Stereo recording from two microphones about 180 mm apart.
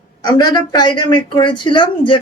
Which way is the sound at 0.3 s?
25° left (ahead or behind).